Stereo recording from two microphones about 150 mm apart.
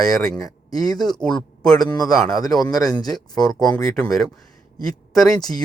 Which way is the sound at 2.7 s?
25° left (ahead or behind).